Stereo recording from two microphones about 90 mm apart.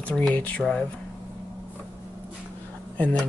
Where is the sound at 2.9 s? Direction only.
15° left (ahead or behind).